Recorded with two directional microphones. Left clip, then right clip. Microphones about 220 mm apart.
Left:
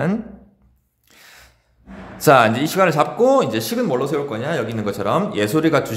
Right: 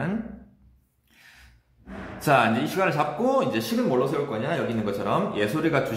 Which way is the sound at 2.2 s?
45° left (ahead or behind).